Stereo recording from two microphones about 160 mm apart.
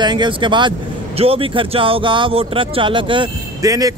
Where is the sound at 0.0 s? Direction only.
30° right (ahead or behind).